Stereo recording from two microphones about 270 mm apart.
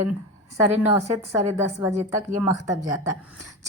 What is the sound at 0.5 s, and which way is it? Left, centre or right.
A woman's voice, centre.